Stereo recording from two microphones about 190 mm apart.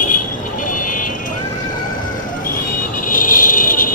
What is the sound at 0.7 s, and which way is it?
Vehicle, 45° left (ahead or behind).